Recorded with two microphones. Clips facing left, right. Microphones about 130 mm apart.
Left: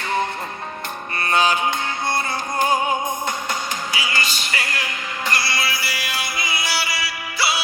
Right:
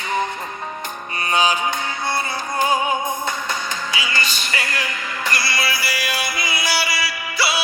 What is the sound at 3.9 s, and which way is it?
Music, 35° left (ahead or behind).